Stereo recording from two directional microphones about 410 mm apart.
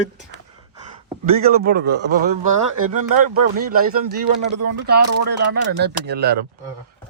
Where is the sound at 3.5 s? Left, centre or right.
Right.